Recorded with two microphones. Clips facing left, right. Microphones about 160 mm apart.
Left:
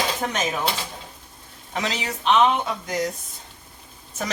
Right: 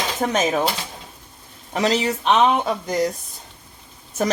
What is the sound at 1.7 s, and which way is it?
Speech, 40° right (ahead or behind).